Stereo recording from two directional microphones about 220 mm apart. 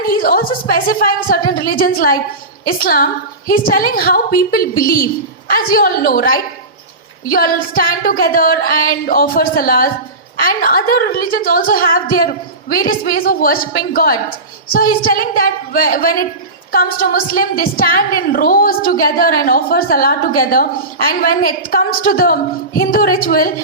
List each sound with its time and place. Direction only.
0.0 s a woman's voice: 40° left (ahead or behind)